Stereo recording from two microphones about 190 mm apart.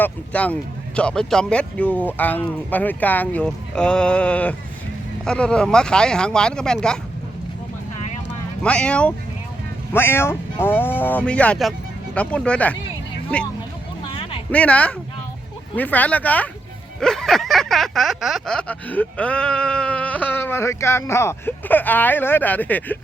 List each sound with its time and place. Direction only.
0.0 s speech: 5° left (ahead or behind)
8.6 s speech: 5° left (ahead or behind)
14.0 s a sound: 30° left (ahead or behind)
14.5 s speech: 5° left (ahead or behind)